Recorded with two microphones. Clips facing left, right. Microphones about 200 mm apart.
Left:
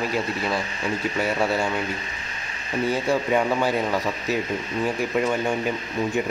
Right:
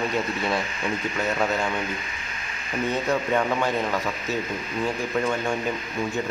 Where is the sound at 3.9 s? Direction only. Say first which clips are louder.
Left 3 dB; 35° left (ahead or behind).